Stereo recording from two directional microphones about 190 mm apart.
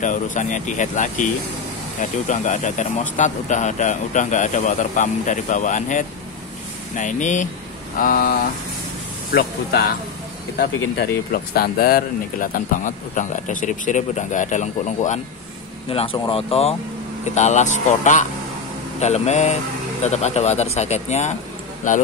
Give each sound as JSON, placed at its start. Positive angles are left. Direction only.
{"t": 0.0, "sound": "speech", "side_deg": 40}
{"t": 2.2, "sound": "speech", "side_deg": 40}
{"t": 11.5, "sound": "speech", "side_deg": 50}